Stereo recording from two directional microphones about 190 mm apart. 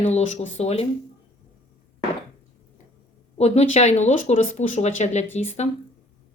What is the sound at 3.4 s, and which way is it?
Speech, 35° left (ahead or behind).